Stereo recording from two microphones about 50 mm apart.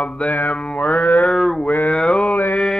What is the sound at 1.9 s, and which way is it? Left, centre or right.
Mantra, left.